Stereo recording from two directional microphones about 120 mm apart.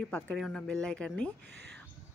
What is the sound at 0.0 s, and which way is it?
Speech, 10° left (ahead or behind).